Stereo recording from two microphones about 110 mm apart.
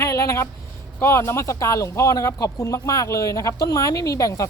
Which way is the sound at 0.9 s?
25° left (ahead or behind).